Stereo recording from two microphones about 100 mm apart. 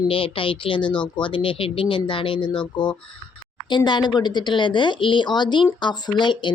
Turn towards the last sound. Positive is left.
turn(degrees=50)  # may be behind; listen again after turning